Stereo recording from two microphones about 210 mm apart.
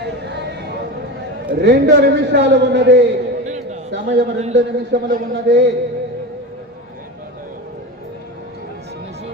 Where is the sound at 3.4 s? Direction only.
35° right (ahead or behind).